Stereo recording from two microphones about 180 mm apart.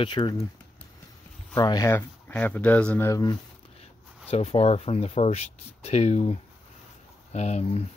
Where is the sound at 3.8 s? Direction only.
35° left (ahead or behind).